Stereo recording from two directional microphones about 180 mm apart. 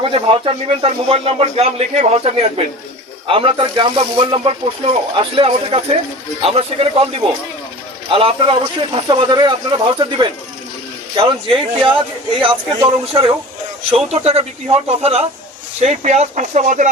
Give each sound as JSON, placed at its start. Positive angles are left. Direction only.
{"t": 0.0, "sound": "speech", "side_deg": -30}
{"t": 8.1, "sound": "speech", "side_deg": -30}